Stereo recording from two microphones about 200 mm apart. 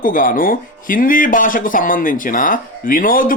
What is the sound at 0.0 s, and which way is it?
Speech, 45° left (ahead or behind).